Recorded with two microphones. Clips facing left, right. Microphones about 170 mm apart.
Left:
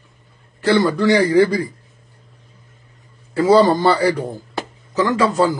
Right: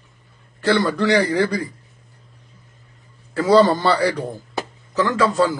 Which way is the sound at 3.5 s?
10° left (ahead or behind).